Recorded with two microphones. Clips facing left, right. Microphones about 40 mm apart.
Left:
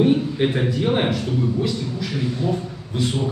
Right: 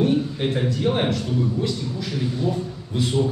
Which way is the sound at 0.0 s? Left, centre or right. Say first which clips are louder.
Left 3 dB; left.